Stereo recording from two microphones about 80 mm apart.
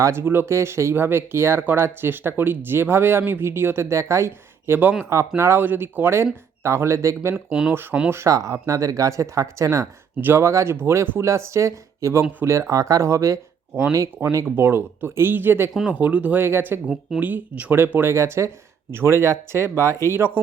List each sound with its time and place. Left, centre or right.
0.0 s speech: right
8.1 s speech: right
10.2 s speech: right